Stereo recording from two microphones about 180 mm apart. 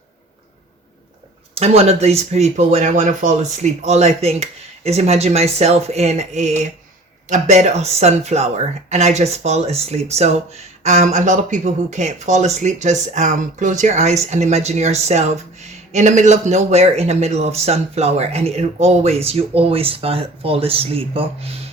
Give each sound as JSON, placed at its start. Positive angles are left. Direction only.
{"t": 1.5, "sound": "speech", "side_deg": -35}